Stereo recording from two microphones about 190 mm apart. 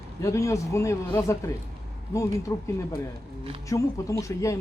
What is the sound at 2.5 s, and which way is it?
Speech, 15° left (ahead or behind).